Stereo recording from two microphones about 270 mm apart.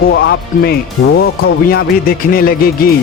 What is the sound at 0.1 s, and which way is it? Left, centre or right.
Speech, left.